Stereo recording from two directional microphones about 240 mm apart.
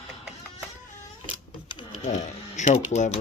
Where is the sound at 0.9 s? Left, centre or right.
Left.